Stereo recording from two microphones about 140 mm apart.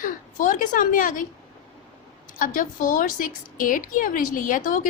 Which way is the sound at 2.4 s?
75° left (ahead or behind).